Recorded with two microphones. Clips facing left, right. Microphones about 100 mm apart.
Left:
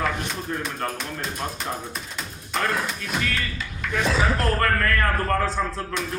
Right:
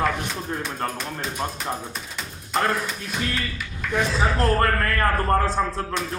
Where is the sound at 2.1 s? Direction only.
Centre (ahead or behind).